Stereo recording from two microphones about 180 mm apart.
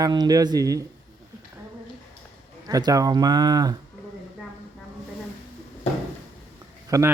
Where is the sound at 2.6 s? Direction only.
20° right (ahead or behind).